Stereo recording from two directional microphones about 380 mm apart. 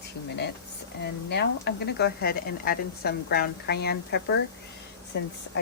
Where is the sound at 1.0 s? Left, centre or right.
Left.